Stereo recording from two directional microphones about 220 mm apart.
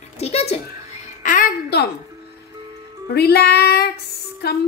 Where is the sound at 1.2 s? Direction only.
40° left (ahead or behind).